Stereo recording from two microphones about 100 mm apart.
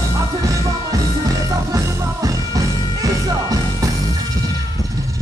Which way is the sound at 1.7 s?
35° right (ahead or behind).